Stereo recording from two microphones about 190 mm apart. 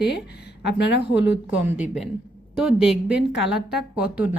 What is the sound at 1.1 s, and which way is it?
Speech, 70° left (ahead or behind).